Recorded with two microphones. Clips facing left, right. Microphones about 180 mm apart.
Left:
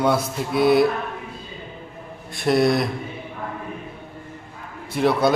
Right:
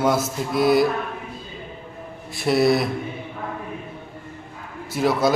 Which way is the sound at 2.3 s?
Centre (ahead or behind).